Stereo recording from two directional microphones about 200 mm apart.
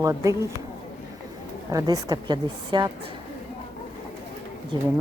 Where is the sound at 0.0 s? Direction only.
15° right (ahead or behind).